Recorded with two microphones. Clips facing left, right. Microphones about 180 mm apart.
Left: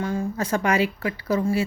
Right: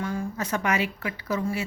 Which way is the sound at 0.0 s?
30° left (ahead or behind).